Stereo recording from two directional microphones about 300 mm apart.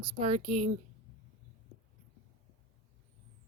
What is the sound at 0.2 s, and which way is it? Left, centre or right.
Speech, centre.